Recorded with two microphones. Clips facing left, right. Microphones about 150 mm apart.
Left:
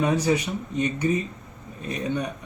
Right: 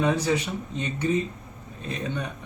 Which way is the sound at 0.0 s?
10° left (ahead or behind).